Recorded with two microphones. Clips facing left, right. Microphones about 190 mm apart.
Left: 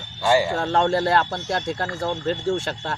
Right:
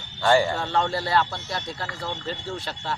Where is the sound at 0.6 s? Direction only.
45° left (ahead or behind).